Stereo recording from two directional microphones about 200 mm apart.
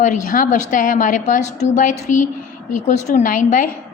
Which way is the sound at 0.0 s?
40° left (ahead or behind).